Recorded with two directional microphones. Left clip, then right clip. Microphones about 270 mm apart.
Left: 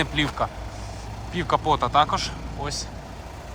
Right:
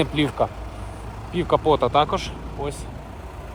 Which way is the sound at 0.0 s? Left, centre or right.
Left.